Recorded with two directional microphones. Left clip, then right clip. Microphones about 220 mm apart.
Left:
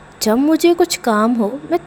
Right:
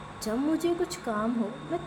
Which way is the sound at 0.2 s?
40° left (ahead or behind).